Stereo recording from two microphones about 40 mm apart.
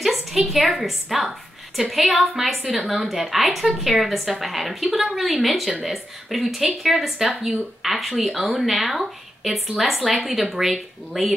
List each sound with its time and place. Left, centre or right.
0.0 s a woman's voice: centre
5.7 s a woman's voice: centre